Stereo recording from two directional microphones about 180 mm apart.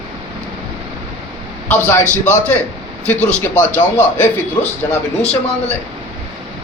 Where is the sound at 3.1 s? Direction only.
5° left (ahead or behind).